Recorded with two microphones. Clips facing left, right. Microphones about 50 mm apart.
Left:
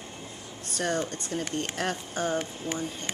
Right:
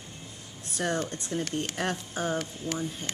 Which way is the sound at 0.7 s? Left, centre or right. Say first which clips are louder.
Left 1 dB; centre.